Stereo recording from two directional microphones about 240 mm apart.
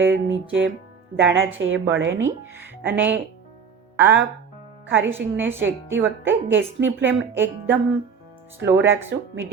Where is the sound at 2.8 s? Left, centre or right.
Centre.